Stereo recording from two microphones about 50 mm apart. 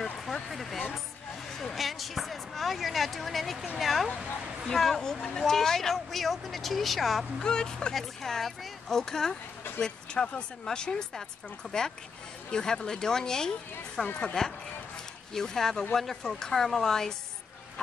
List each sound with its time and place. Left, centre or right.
0.3 s a woman's voice: centre
7.3 s a woman's voice: centre
11.6 s speech: centre
12.4 s a woman's voice: centre